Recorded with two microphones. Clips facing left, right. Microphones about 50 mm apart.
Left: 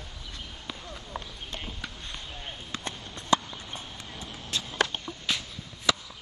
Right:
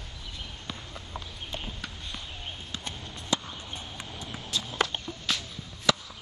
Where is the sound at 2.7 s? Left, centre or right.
Left.